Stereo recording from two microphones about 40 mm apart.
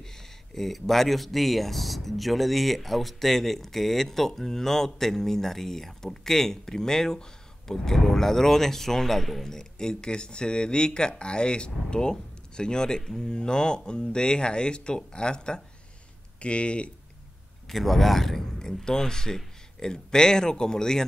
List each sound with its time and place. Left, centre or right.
0.6 s speech: centre; by 16.9 s left
17.6 s a man's voice: centre